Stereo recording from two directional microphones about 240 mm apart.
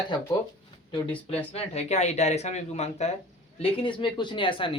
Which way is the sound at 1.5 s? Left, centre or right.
Left.